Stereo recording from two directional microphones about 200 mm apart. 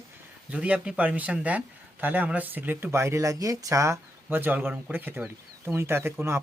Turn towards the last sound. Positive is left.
turn(degrees=-10)  # may be behind; listen again after turning